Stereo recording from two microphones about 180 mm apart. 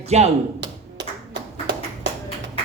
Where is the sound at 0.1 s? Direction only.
35° right (ahead or behind).